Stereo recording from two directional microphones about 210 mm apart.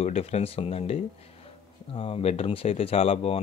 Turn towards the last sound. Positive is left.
turn(degrees=30)  # may be behind; listen again after turning